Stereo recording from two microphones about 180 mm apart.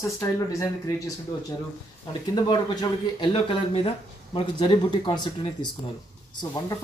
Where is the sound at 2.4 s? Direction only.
25° left (ahead or behind).